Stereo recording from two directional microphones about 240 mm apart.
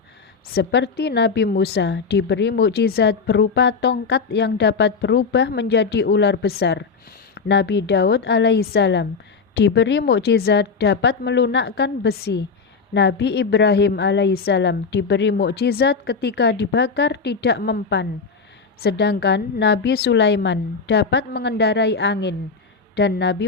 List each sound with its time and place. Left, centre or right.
0.4 s a woman's voice: left